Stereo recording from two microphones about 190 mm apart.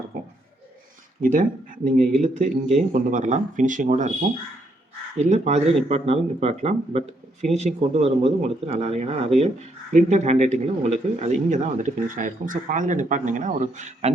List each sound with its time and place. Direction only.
1.2 s speech: 45° right (ahead or behind)
5.1 s speech: 35° right (ahead or behind)